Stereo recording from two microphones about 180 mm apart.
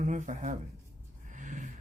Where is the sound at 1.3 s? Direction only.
45° right (ahead or behind).